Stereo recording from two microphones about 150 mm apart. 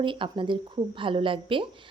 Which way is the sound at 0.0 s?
35° right (ahead or behind).